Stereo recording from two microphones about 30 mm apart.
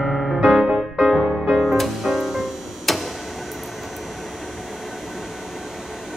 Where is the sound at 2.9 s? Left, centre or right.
Centre.